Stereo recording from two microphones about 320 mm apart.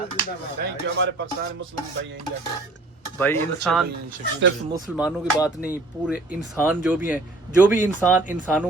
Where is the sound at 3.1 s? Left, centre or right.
Centre.